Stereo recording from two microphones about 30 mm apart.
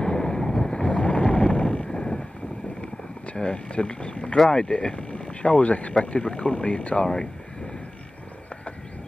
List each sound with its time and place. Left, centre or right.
0.0 s boat: left
0.8 s boat: left
3.3 s speech: left
4.5 s speech: left
6.1 s speech: left
7.0 s speech: left